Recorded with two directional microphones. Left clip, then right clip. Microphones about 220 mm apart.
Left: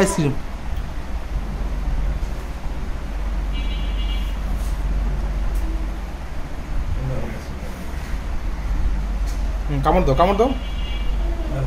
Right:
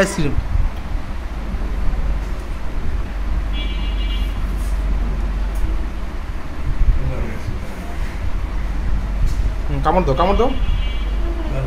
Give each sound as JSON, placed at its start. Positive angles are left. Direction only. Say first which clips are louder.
{"t": 0.0, "sound": "speech", "louder": "right 1 dB", "side_deg": 20}
{"t": 9.8, "sound": "speech", "louder": "right 1 dB", "side_deg": 25}